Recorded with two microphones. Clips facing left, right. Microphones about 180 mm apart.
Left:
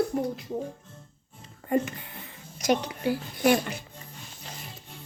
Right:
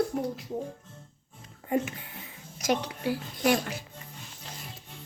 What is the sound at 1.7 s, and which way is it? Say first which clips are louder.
Speech: left 2 dB; 5° right (ahead or behind).